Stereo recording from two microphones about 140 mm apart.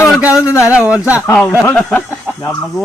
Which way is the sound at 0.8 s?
10° right (ahead or behind).